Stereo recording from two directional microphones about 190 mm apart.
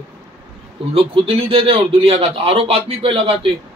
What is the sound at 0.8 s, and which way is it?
A man's voice, 30° right (ahead or behind).